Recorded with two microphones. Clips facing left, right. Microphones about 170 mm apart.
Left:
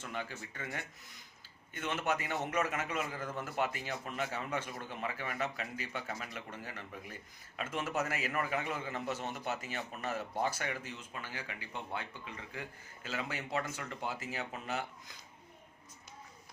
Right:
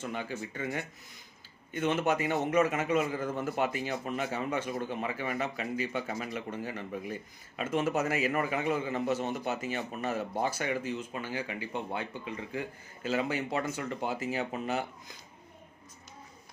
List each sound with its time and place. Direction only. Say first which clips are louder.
0.1 s a man's voice: right 6 dB; 15° right (ahead or behind)